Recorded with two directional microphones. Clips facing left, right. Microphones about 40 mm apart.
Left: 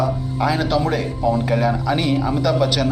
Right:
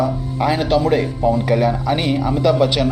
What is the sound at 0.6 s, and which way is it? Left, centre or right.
Speech, right.